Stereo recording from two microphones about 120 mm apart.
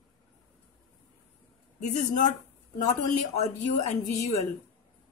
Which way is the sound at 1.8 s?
90° left.